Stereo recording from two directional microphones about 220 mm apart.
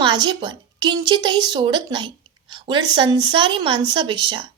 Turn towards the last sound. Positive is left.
turn(degrees=-20)  # may be behind; listen again after turning